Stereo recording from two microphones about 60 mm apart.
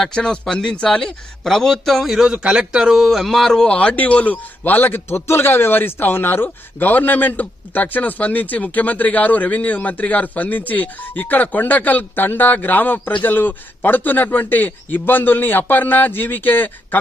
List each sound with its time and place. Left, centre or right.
0.0 s a man's voice: centre
2.3 s speech: centre
3.7 s a man's voice: left